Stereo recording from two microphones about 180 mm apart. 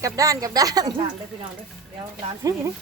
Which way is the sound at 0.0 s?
20° right (ahead or behind).